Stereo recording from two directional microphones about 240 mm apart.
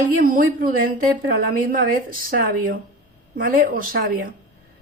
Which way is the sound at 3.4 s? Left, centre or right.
Right.